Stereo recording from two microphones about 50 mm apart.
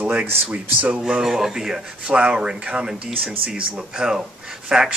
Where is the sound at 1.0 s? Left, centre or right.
Centre.